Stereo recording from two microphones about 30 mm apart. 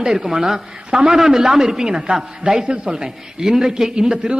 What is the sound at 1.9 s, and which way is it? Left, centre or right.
A woman's voice, right.